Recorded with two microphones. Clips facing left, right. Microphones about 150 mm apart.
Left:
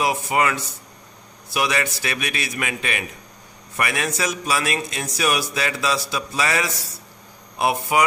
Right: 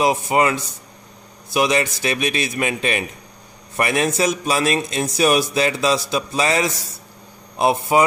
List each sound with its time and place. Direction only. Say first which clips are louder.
0.0 s a man's voice: right 4 dB; 25° right (ahead or behind)